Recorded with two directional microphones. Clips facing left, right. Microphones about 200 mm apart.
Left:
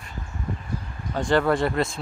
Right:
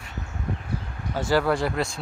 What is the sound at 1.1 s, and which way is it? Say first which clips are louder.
Speech: left 1 dB; 5° right (ahead or behind).